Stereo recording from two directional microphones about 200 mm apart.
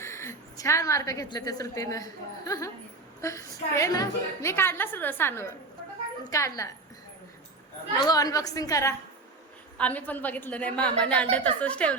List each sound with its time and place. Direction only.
0.0 s a woman's voice: 15° left (ahead or behind)
7.9 s a woman's voice: 20° left (ahead or behind)